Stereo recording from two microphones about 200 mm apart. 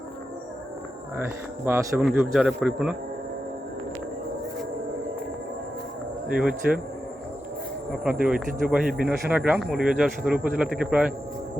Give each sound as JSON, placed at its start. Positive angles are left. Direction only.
{"t": 1.6, "sound": "speech", "side_deg": -15}
{"t": 2.3, "sound": "speech", "side_deg": 0}
{"t": 6.3, "sound": "speech", "side_deg": -5}
{"t": 8.0, "sound": "speech", "side_deg": -5}